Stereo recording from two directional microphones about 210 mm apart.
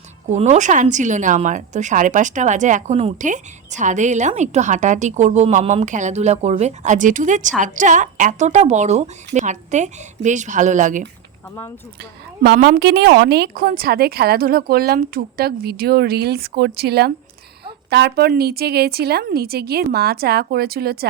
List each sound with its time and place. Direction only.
0.3 s a woman's voice: 35° right (ahead or behind)
12.4 s speech: 50° right (ahead or behind)